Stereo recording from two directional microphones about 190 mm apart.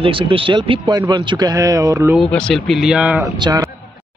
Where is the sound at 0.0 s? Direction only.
25° right (ahead or behind).